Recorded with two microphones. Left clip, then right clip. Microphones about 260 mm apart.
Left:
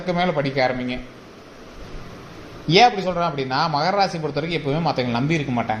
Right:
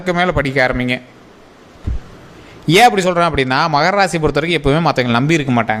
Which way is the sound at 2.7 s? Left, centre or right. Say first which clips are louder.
Right 5 dB; right.